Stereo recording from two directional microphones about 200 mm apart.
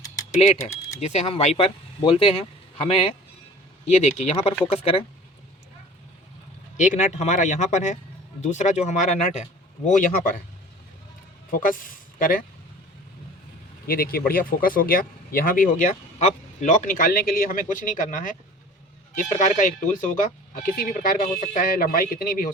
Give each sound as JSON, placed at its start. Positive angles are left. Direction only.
{"t": 0.4, "sound": "speech", "side_deg": 35}
{"t": 6.7, "sound": "speech", "side_deg": 40}
{"t": 11.5, "sound": "speech", "side_deg": 45}
{"t": 13.8, "sound": "speech", "side_deg": 50}